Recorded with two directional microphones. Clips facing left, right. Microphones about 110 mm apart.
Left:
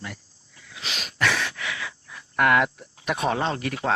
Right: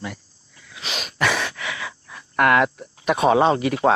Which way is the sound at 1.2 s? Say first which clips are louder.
Right 2 dB; 10° right (ahead or behind).